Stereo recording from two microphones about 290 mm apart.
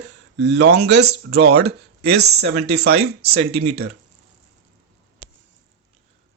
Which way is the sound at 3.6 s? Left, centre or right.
Right.